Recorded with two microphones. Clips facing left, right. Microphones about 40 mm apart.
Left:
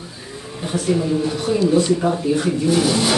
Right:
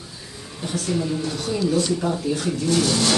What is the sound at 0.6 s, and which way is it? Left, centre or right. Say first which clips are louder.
Speech: left 5 dB; centre.